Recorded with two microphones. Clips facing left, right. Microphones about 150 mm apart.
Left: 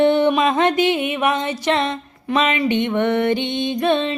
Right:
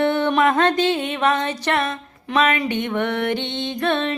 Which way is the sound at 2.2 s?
10° left (ahead or behind).